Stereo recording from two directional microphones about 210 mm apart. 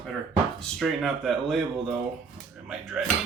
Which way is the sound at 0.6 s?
Centre (ahead or behind).